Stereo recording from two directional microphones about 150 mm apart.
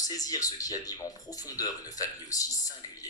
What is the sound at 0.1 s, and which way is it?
Speech, 25° left (ahead or behind).